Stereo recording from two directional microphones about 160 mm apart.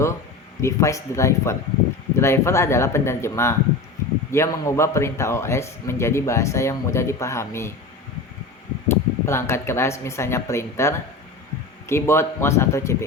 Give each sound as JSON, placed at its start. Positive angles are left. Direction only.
{"t": 0.6, "sound": "a man's voice", "side_deg": 20}
{"t": 8.9, "sound": "a man's voice", "side_deg": 15}